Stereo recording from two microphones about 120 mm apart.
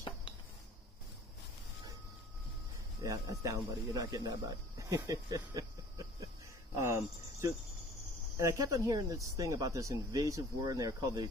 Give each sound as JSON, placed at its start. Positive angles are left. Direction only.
{"t": 3.0, "sound": "speech", "side_deg": -30}
{"t": 6.8, "sound": "cricket", "side_deg": -20}
{"t": 8.4, "sound": "speech", "side_deg": -25}